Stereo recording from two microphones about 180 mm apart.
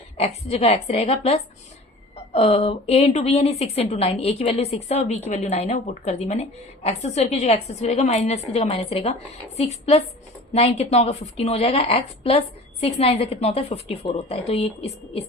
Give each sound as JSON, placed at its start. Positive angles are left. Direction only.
{"t": 0.2, "sound": "a woman's voice", "side_deg": 35}